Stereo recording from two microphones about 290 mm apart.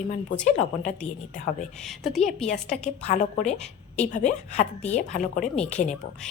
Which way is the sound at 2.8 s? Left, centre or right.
Left.